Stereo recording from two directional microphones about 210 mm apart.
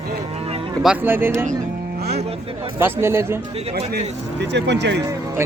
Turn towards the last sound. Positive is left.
turn(degrees=-10)  # may be behind; listen again after turning